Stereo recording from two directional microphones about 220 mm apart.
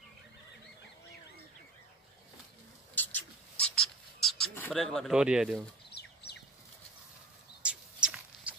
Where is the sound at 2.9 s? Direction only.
5° left (ahead or behind).